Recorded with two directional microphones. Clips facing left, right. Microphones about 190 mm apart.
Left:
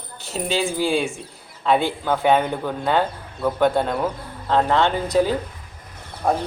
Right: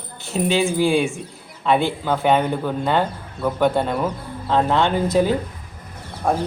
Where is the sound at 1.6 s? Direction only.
Centre (ahead or behind).